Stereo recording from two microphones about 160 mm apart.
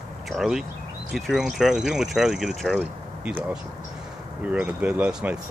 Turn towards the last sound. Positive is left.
turn(degrees=-5)  # may be behind; listen again after turning